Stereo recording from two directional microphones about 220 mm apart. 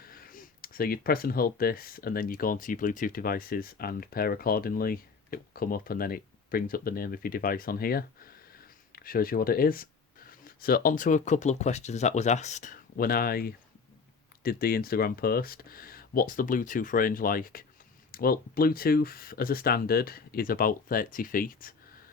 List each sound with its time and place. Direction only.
0.0 s speech: 40° left (ahead or behind)